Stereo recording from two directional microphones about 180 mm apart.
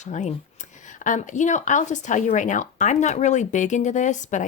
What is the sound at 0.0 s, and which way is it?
A woman's voice, 40° left (ahead or behind).